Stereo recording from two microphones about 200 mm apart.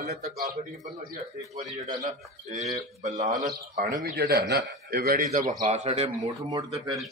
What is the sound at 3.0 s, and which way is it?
Speech, 35° right (ahead or behind).